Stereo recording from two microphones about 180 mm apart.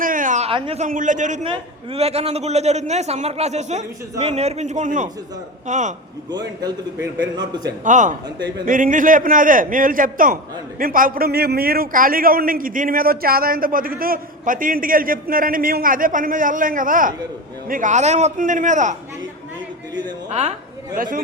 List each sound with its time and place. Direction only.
0.0 s a sound: 50° right (ahead or behind); by 0.9 s 30° right (ahead or behind)
0.9 s a man's voice: 45° right (ahead or behind)
1.5 s a man's voice: 35° right (ahead or behind)
6.6 s a man's voice: 20° right (ahead or behind)
7.9 s a man's voice: 45° right (ahead or behind)
20.9 s a man's voice: 50° right (ahead or behind)